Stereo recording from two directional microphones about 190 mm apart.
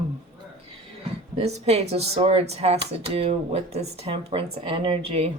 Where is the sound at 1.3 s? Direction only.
35° right (ahead or behind).